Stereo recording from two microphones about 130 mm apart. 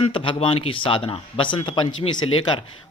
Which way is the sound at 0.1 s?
40° left (ahead or behind).